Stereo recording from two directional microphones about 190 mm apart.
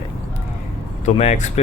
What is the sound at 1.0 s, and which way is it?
Speech, 35° left (ahead or behind).